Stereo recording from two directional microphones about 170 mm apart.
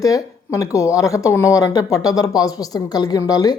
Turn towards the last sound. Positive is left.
turn(degrees=20)  # may be behind; listen again after turning